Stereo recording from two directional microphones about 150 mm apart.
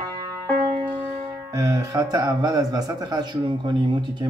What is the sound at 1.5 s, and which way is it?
Speech, 25° right (ahead or behind).